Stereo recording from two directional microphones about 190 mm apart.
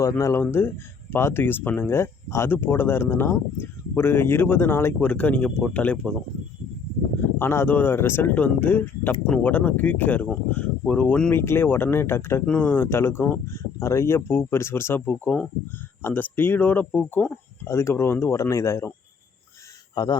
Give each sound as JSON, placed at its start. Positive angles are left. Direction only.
{"t": 0.0, "sound": "speech", "side_deg": 15}
{"t": 7.3, "sound": "speech", "side_deg": 10}
{"t": 20.0, "sound": "speech", "side_deg": 20}